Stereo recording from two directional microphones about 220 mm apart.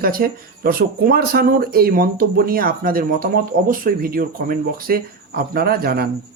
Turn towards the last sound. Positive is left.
turn(degrees=-45)  # may be behind; listen again after turning